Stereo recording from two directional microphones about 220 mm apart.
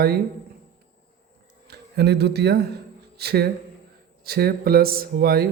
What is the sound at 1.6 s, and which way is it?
Speech, 45° right (ahead or behind).